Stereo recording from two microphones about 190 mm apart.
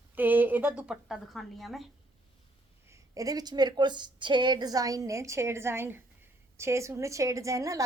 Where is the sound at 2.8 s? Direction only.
15° right (ahead or behind).